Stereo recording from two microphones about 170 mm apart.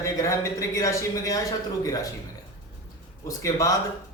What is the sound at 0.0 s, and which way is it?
A man's voice, 20° left (ahead or behind).